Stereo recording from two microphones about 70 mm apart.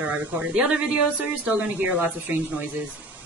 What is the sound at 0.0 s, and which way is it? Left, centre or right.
A woman's voice, centre.